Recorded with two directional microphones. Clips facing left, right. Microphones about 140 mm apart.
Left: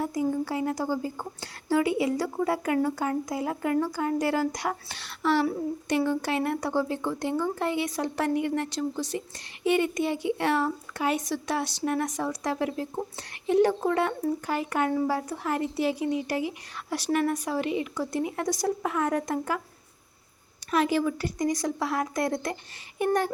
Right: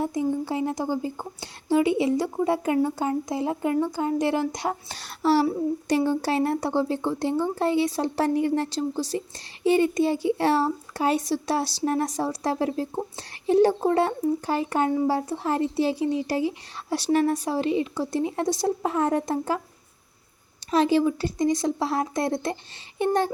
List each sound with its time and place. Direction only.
0.0 s speech: 20° right (ahead or behind)
4.9 s a child's voice: 40° right (ahead or behind)
20.7 s speech: 30° right (ahead or behind)